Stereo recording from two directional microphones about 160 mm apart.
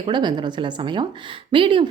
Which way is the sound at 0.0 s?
30° right (ahead or behind).